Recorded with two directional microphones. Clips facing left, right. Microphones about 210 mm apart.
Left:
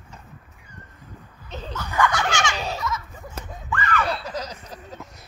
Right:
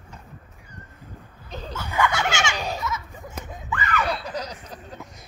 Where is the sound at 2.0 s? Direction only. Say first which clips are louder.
Left 1 dB; 25° right (ahead or behind).